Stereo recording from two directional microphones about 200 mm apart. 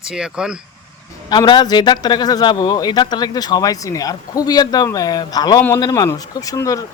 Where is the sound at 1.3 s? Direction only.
20° left (ahead or behind).